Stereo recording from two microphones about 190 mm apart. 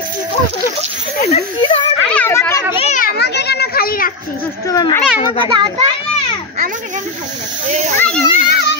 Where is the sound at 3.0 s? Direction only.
60° left (ahead or behind).